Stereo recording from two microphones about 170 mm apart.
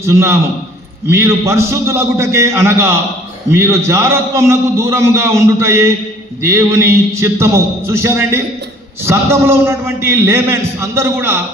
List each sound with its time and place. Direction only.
0.0 s a man's voice: 15° right (ahead or behind)